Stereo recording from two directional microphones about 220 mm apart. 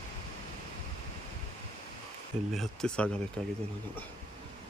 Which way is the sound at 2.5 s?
Centre (ahead or behind).